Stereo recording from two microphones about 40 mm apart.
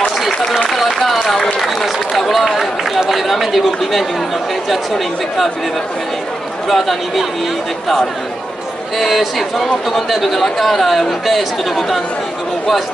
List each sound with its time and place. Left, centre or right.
1.2 s run: centre
3.0 s chatter: centre
4.6 s speech: centre
6.7 s speech: centre
8.9 s speech: centre